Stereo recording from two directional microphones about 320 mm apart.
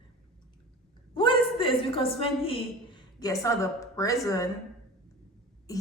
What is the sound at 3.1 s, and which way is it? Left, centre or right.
A woman's voice, centre.